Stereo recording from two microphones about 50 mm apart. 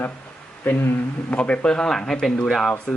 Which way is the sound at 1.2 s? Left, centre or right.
Left.